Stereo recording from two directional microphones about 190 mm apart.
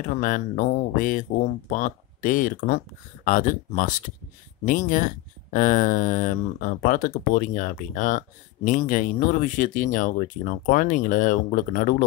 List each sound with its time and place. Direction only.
0.1 s speech: 45° left (ahead or behind)